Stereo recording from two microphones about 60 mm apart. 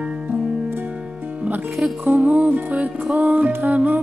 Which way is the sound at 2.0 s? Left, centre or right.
Right.